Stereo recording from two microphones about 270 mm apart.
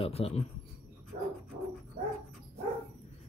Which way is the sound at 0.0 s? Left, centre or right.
Left.